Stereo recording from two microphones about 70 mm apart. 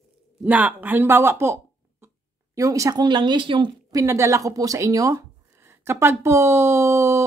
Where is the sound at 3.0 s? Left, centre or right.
Right.